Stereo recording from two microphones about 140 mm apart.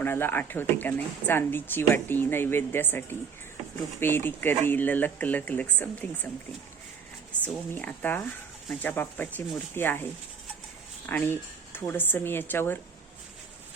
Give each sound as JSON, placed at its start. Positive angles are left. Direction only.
{"t": 0.0, "sound": "speech", "side_deg": 15}
{"t": 7.7, "sound": "speech", "side_deg": 15}